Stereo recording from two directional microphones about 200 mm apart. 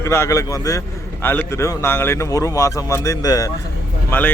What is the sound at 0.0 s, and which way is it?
A man's voice, 15° left (ahead or behind).